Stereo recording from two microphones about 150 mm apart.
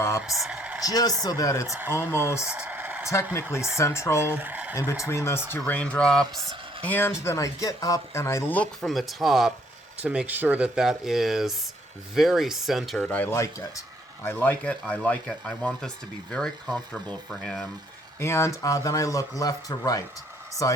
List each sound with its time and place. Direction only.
0.2 s speech: 5° right (ahead or behind)
0.9 s speech: 25° left (ahead or behind)
2.4 s a sound: 5° right (ahead or behind)
3.8 s speech: 20° left (ahead or behind)
4.4 s speech: 10° right (ahead or behind)
4.7 s speech: 20° left (ahead or behind); by 13.0 s centre (ahead or behind)
13.0 s speech: 10° left (ahead or behind)